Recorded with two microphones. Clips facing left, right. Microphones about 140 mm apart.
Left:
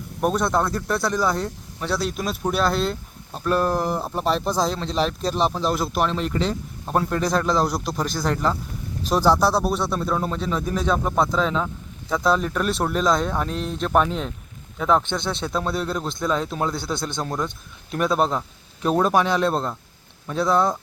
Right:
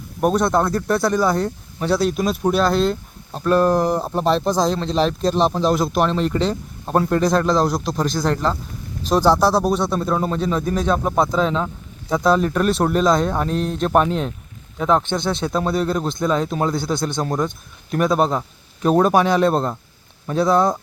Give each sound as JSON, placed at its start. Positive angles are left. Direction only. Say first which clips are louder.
{"t": 0.2, "sound": "speech", "louder": "right 4 dB", "side_deg": 0}
{"t": 6.2, "sound": "speech", "louder": "right 4 dB", "side_deg": -35}
{"t": 6.8, "sound": "speech", "louder": "right 5 dB", "side_deg": 0}
{"t": 11.6, "sound": "a sound", "louder": "right 2 dB", "side_deg": -15}
{"t": 12.2, "sound": "a man's voice", "louder": "right 4 dB", "side_deg": 0}